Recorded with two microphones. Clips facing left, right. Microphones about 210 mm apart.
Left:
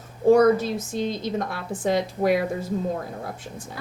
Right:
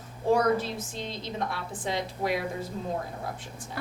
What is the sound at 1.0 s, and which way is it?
A woman's voice, 50° left (ahead or behind).